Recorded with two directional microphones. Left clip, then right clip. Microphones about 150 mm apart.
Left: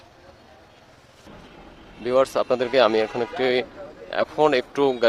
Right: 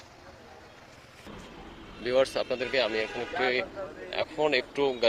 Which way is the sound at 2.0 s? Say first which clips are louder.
Left 6 dB; 35° left (ahead or behind).